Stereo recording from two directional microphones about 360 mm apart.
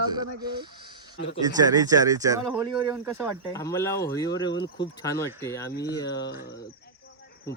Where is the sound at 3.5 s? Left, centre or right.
Centre.